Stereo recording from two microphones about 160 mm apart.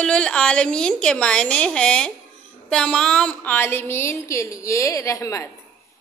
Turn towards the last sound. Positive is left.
turn(degrees=20)  # may be behind; listen again after turning